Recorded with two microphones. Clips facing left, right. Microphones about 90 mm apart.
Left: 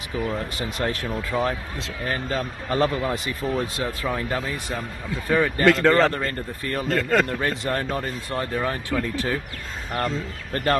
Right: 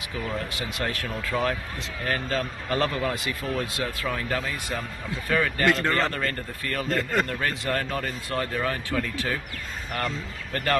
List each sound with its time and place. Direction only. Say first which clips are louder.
0.6 s speech: left 4 dB; 35° left (ahead or behind)
1.3 s speech: left 1 dB; 20° left (ahead or behind)
5.9 s speech: left 7 dB; 35° left (ahead or behind)
7.0 s speech: left 6 dB; 90° left
7.2 s speech: left 3 dB; 25° left (ahead or behind)